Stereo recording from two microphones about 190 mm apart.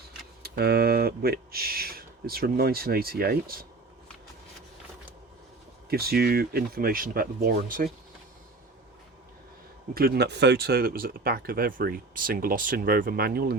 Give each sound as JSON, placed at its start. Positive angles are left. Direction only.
{"t": 0.4, "sound": "speech", "side_deg": -55}
{"t": 5.9, "sound": "speech", "side_deg": -55}
{"t": 9.9, "sound": "speech", "side_deg": -55}